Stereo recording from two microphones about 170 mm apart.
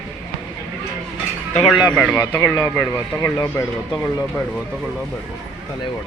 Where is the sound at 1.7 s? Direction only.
10° right (ahead or behind).